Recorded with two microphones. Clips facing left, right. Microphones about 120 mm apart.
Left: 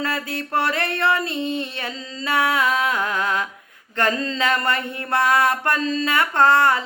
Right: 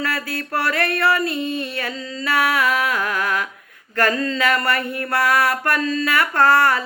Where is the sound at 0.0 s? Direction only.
25° left (ahead or behind).